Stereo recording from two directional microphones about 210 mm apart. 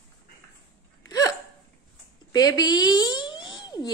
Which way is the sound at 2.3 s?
20° left (ahead or behind).